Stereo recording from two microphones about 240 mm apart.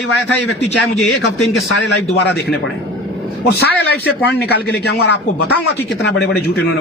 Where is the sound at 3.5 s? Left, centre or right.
Left.